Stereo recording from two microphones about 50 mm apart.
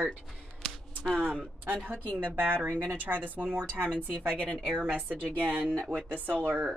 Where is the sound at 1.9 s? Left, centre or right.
Left.